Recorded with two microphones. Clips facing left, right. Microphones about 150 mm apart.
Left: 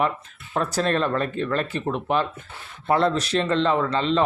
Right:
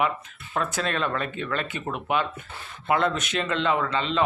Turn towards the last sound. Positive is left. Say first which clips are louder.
# left 3 dB
turn(degrees=40)  # may be behind; listen again after turning